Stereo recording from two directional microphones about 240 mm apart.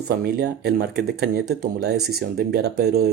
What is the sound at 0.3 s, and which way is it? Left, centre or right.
Speech, right.